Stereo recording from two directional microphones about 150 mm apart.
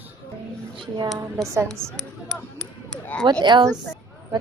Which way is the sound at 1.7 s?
5° left (ahead or behind).